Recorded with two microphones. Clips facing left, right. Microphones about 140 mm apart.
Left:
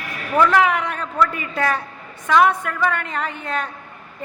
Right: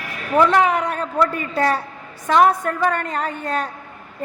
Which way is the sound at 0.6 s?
35° right (ahead or behind).